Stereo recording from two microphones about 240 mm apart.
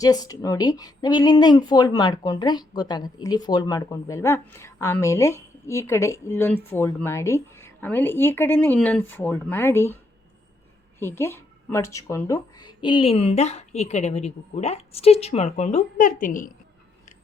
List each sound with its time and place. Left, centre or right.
0.0 s speech: centre
11.0 s a woman's voice: centre; by 16.5 s left